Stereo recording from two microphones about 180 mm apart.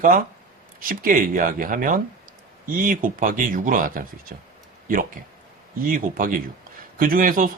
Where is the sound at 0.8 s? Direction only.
50° right (ahead or behind).